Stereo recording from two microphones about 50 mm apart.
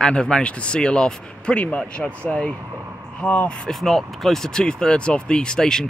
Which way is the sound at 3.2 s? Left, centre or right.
Left.